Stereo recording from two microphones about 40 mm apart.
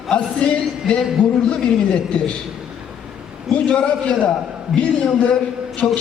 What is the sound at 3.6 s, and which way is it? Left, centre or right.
A man's voice, left.